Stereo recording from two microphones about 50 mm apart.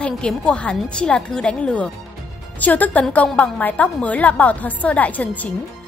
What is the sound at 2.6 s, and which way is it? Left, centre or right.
A woman's voice, left.